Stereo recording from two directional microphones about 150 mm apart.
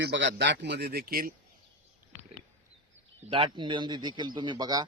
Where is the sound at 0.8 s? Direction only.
90° right.